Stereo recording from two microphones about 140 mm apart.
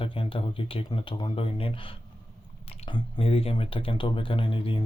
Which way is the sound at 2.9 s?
45° left (ahead or behind).